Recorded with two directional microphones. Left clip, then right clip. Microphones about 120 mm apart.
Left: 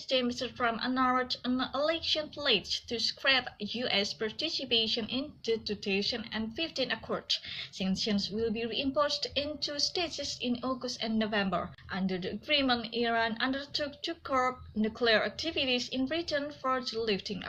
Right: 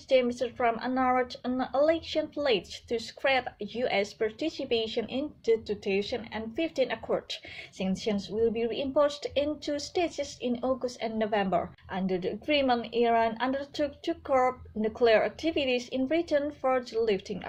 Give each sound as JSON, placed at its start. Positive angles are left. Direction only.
{"t": 0.1, "sound": "a woman's voice", "side_deg": -50}